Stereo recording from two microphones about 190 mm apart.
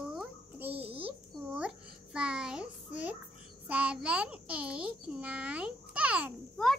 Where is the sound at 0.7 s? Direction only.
30° right (ahead or behind).